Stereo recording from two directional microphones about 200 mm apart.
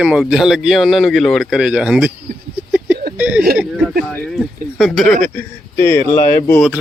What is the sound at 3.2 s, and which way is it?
A man's voice, 5° right (ahead or behind).